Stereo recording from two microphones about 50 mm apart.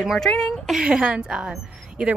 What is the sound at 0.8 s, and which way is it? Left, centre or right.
Speech, right.